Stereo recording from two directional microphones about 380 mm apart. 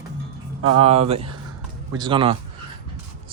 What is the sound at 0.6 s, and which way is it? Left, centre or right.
Speech, right.